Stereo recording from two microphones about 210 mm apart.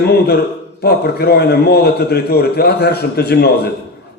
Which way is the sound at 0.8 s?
50° left (ahead or behind).